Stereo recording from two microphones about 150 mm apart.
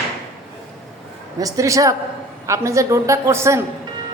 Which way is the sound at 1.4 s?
20° right (ahead or behind).